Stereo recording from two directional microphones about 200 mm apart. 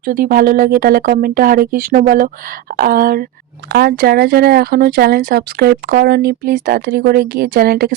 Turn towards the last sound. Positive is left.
turn(degrees=-50)  # may be behind; listen again after turning